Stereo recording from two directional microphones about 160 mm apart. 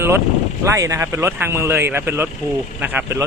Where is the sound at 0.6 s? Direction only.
20° right (ahead or behind).